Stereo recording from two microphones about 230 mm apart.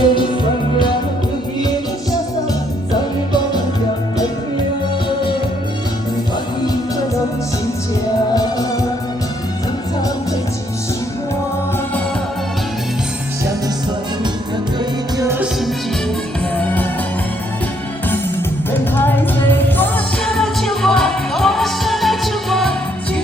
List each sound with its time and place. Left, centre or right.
0.0 s music: left
15.2 s music: centre
18.7 s music: centre